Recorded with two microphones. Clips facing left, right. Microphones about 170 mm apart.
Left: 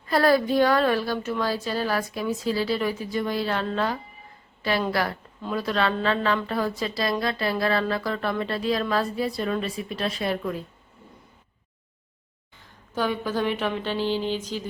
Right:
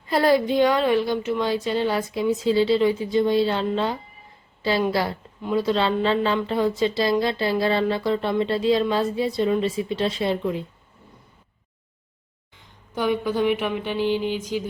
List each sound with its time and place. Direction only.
0.1 s speech: 20° right (ahead or behind)
12.9 s a woman's voice: 15° right (ahead or behind)